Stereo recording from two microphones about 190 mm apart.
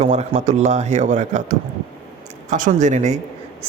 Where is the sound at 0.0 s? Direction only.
35° right (ahead or behind).